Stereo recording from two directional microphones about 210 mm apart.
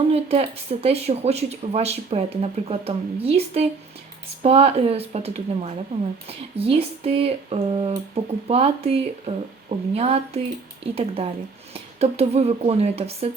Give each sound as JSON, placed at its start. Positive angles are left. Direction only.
{"t": 0.1, "sound": "speech", "side_deg": -30}